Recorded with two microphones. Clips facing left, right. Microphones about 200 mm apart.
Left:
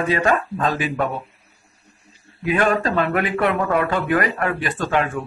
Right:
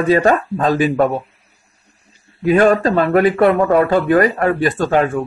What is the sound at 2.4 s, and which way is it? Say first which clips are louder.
Speech: right 7 dB; 35° right (ahead or behind).